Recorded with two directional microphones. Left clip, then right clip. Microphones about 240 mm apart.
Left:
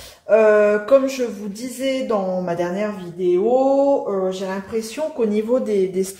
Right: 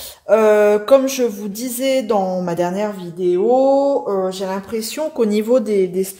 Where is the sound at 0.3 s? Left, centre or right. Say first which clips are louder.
Right 2 dB; right.